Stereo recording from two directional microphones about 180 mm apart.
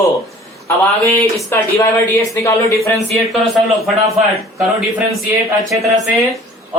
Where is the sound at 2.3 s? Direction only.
15° left (ahead or behind).